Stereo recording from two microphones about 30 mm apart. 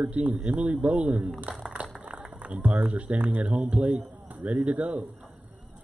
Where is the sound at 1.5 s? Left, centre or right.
Right.